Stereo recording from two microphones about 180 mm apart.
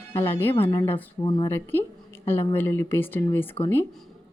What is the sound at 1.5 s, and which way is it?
Speech, 10° left (ahead or behind).